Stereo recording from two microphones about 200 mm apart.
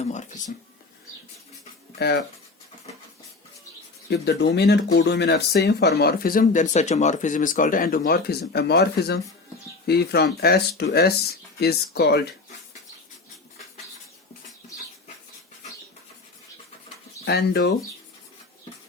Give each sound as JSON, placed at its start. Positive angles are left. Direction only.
{"t": 0.0, "sound": "speech", "side_deg": 35}
{"t": 4.1, "sound": "speech", "side_deg": 55}
{"t": 17.2, "sound": "speech", "side_deg": 55}